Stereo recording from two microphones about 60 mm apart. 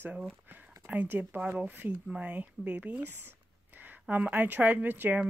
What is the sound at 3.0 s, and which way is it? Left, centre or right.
Speech, right.